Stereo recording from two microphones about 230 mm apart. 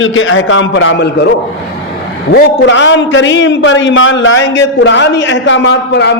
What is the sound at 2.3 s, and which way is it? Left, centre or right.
A man's voice, left.